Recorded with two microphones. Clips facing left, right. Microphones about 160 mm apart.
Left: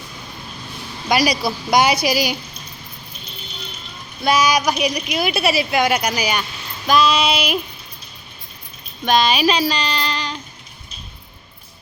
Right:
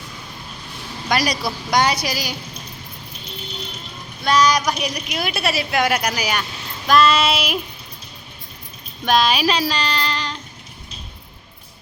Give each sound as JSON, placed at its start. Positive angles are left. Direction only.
{"t": 1.1, "sound": "a woman's voice", "side_deg": 5}
{"t": 4.2, "sound": "a woman's voice", "side_deg": 10}
{"t": 9.0, "sound": "speech", "side_deg": -5}